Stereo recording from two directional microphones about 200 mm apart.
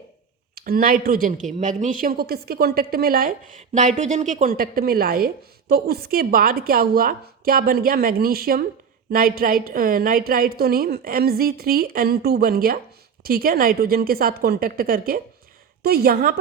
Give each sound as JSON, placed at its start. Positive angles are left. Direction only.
{"t": 0.5, "sound": "speech", "side_deg": -45}